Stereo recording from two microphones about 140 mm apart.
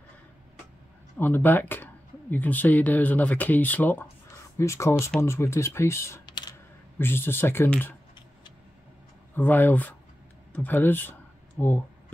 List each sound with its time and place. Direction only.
1.1 s speech: 15° left (ahead or behind)
9.3 s speech: 15° left (ahead or behind)